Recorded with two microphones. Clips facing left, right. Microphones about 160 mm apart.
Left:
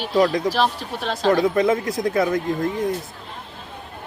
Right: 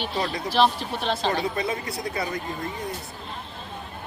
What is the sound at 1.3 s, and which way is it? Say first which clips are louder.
Speech: left 14 dB; 90° left.